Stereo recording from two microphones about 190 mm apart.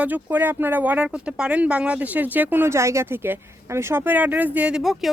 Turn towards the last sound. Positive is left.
turn(degrees=0)  # may be behind; listen again after turning